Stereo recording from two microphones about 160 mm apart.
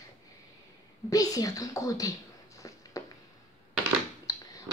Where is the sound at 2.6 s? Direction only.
20° left (ahead or behind).